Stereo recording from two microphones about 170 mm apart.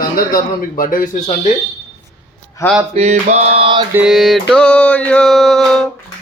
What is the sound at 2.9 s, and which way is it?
Male singing, 40° right (ahead or behind).